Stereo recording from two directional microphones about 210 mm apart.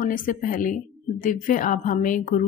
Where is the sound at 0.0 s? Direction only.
40° left (ahead or behind).